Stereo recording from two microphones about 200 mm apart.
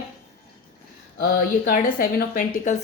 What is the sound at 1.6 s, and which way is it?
A woman's voice, 45° left (ahead or behind).